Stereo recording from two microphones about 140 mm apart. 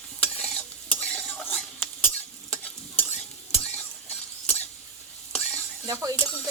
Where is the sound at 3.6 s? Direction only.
10° left (ahead or behind).